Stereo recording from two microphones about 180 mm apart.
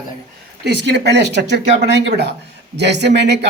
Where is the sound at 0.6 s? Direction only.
70° right (ahead or behind).